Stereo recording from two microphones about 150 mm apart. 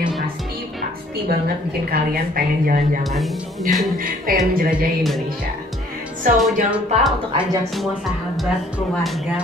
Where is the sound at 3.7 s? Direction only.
65° right (ahead or behind).